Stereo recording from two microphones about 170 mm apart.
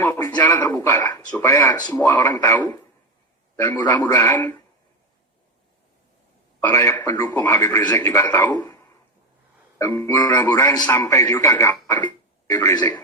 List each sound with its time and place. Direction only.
0.0 s a man's voice: 15° left (ahead or behind)
6.6 s a man's voice: 15° left (ahead or behind)
8.5 s a sound: 20° left (ahead or behind)
9.7 s a man's voice: 15° left (ahead or behind)